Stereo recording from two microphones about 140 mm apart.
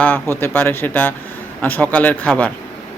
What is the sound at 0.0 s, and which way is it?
Speech, 15° left (ahead or behind).